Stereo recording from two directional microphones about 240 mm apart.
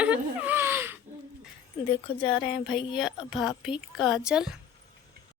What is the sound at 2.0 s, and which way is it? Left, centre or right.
Speech, left.